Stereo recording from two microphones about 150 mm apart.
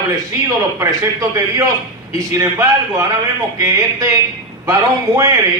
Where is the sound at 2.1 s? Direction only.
20° right (ahead or behind).